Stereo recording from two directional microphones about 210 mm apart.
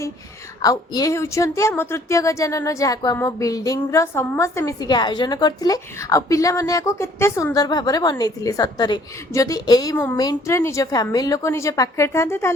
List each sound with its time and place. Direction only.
0.6 s a woman's voice: 15° left (ahead or behind)